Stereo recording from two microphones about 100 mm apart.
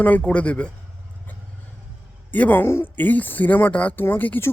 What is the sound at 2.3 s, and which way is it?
Speech, 20° left (ahead or behind).